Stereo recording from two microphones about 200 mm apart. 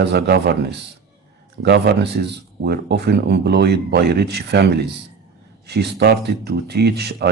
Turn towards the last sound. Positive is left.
turn(degrees=-55)  # may be behind; listen again after turning